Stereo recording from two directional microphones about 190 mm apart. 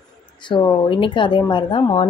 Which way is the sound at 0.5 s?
20° left (ahead or behind).